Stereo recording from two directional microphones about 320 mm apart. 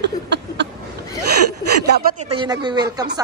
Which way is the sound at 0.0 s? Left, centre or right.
Right.